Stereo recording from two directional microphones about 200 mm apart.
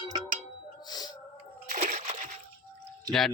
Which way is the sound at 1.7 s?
35° right (ahead or behind).